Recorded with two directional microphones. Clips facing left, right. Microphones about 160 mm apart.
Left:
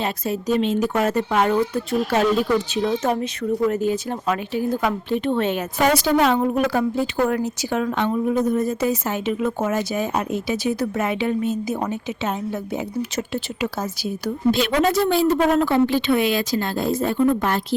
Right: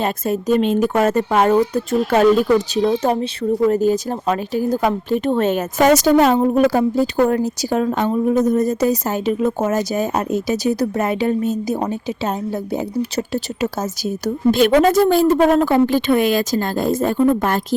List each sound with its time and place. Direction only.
0.0 s speech: 50° right (ahead or behind)
2.7 s speech: 35° right (ahead or behind)